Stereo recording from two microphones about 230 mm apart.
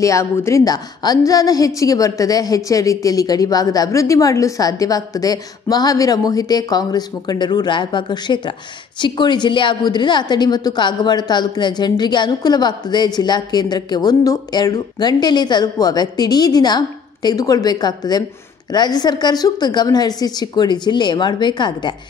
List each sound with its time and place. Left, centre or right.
0.0 s a woman's voice: centre